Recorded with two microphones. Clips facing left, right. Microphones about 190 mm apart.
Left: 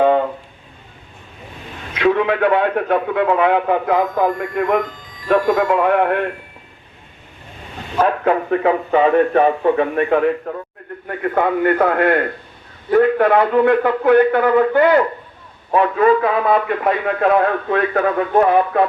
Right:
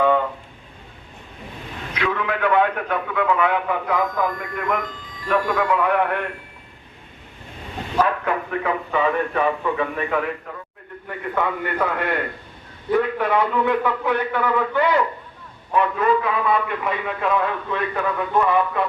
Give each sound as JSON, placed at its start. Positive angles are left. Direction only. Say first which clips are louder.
{"t": 2.0, "sound": "a man's voice", "louder": "left 8 dB", "side_deg": 40}
{"t": 8.0, "sound": "a man's voice", "louder": "left 7 dB", "side_deg": 45}
{"t": 11.1, "sound": "a man's voice", "louder": "left 7 dB", "side_deg": 60}